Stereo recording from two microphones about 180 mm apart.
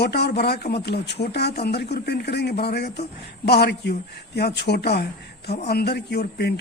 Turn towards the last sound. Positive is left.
turn(degrees=65)  # may be behind; listen again after turning